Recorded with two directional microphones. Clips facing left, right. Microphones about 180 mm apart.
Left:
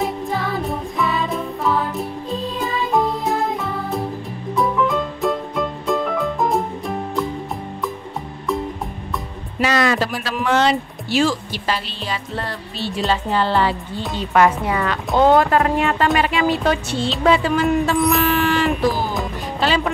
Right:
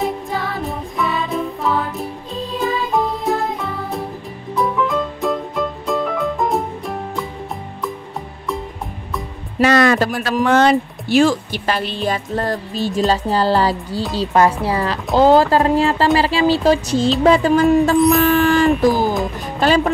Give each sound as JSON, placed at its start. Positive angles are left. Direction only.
{"t": 0.6, "sound": "music", "side_deg": 0}
{"t": 9.6, "sound": "music", "side_deg": -55}
{"t": 10.2, "sound": "speech", "side_deg": -50}
{"t": 17.9, "sound": "speech", "side_deg": 0}
{"t": 18.2, "sound": "a sound", "side_deg": -45}
{"t": 19.6, "sound": "speech", "side_deg": -45}